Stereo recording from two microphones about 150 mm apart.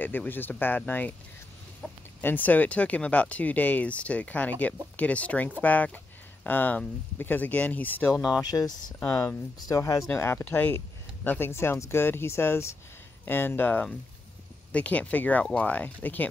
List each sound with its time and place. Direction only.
0.0 s speech: 10° left (ahead or behind)
1.8 s speech: centre (ahead or behind)
2.2 s speech: 10° left (ahead or behind)
8.4 s speech: 25° left (ahead or behind)